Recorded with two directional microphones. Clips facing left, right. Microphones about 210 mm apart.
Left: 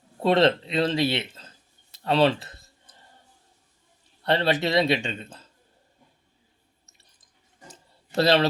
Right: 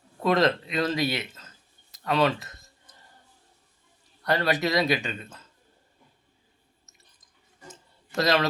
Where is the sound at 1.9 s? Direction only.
30° left (ahead or behind).